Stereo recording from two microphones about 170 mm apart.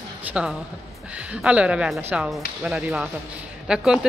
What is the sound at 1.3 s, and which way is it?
Speech, 5° right (ahead or behind).